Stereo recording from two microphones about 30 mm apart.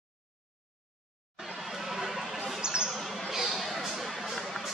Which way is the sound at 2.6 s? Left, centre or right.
Right.